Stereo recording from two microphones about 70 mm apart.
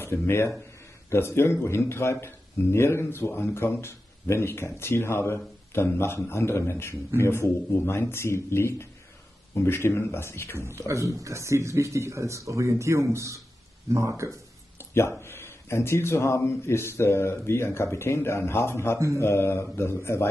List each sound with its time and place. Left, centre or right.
0.0 s speech: left
10.9 s speech: right
14.8 s speech: left